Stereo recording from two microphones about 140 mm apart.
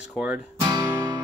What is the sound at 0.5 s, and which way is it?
Guitar, 30° right (ahead or behind).